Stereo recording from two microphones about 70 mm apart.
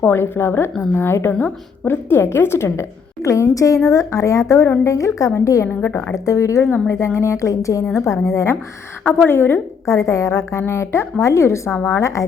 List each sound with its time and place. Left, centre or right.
0.0 s a woman's voice: left
1.3 s a woman's voice: left
1.9 s a woman's voice: left
3.2 s a woman's voice: left
5.9 s a woman's voice: left
6.1 s a woman's voice: left
9.0 s a woman's voice: left
9.8 s a woman's voice: left